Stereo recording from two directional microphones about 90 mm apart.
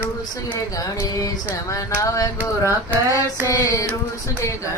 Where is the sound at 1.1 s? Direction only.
40° left (ahead or behind).